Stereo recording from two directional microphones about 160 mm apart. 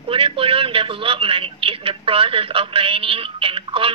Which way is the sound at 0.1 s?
35° right (ahead or behind).